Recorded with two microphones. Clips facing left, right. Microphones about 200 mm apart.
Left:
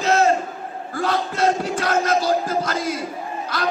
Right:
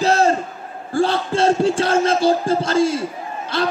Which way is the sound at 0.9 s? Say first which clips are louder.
Right 5 dB; 30° right (ahead or behind).